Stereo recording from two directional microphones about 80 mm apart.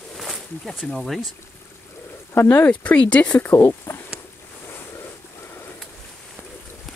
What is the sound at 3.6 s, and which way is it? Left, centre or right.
Speech, left.